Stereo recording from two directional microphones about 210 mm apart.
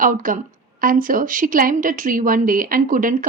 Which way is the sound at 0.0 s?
40° right (ahead or behind).